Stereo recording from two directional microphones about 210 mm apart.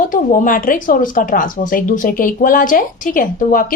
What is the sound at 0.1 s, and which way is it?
Speech, 40° left (ahead or behind).